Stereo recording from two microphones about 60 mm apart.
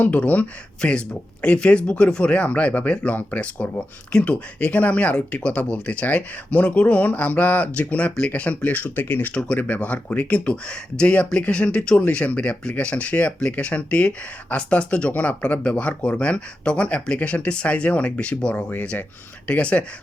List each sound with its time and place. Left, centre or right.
0.0 s speech: left
9.3 s speech: centre
18.7 s speech: left